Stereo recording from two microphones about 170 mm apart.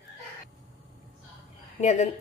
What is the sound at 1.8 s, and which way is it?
Speech, 45° left (ahead or behind).